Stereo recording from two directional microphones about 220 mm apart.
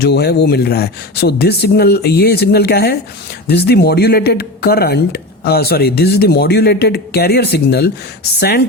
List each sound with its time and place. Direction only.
0.0 s speech: 45° left (ahead or behind)